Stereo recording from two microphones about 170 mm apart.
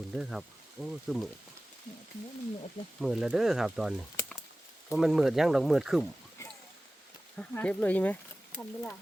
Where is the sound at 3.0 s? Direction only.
5° right (ahead or behind).